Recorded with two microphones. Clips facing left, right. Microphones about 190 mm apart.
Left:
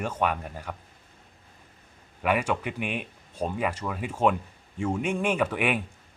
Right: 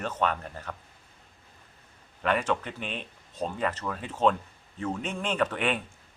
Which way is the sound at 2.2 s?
10° left (ahead or behind).